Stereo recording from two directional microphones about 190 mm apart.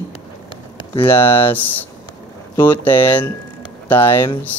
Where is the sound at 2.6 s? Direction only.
10° left (ahead or behind).